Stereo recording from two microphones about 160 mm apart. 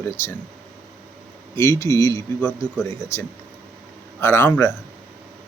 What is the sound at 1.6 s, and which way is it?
Speech, 20° left (ahead or behind).